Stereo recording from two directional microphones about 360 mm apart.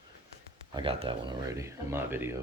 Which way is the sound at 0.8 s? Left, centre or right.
Centre.